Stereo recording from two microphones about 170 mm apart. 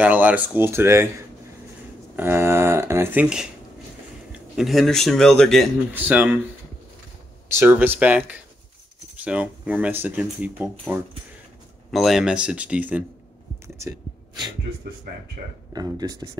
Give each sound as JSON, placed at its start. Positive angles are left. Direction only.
{"t": 0.0, "sound": "speech", "side_deg": -10}
{"t": 2.1, "sound": "speech", "side_deg": -15}
{"t": 4.6, "sound": "a man's voice", "side_deg": 0}
{"t": 5.9, "sound": "speech", "side_deg": -10}
{"t": 7.5, "sound": "speech", "side_deg": -10}
{"t": 13.7, "sound": "speech", "side_deg": -20}
{"t": 15.7, "sound": "speech", "side_deg": -25}